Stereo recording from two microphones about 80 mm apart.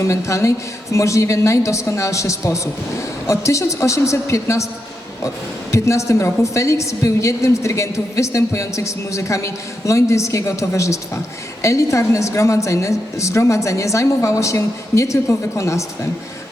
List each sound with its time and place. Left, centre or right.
0.0 s a woman's voice: left
5.7 s a woman's voice: left